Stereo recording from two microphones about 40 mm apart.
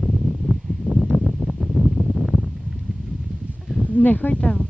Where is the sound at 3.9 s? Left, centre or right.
Left.